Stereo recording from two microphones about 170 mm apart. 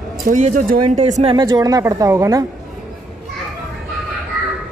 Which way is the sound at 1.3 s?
25° right (ahead or behind).